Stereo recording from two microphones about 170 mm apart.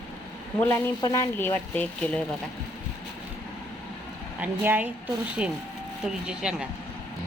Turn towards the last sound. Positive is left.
turn(degrees=-5)  # may be behind; listen again after turning